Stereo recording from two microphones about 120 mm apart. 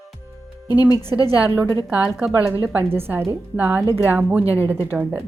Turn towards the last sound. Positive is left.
turn(degrees=-15)  # may be behind; listen again after turning